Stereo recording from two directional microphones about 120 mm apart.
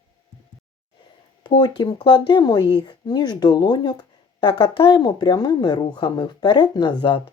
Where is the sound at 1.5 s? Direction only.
40° left (ahead or behind).